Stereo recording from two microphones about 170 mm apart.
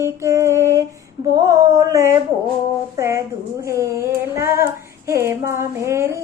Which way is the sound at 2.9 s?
15° right (ahead or behind).